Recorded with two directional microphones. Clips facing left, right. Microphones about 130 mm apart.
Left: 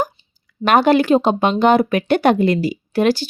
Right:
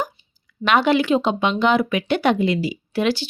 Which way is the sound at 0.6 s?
45° left (ahead or behind).